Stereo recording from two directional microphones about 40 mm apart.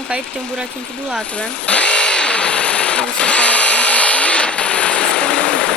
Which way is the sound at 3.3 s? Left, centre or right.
Left.